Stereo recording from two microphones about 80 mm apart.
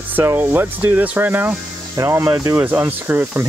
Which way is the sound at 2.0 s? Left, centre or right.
Right.